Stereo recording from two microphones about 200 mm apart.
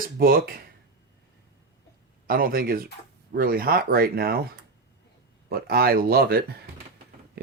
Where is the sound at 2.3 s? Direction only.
45° right (ahead or behind).